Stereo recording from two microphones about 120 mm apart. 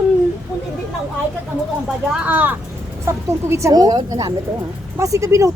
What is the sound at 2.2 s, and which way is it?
Speech, 15° right (ahead or behind).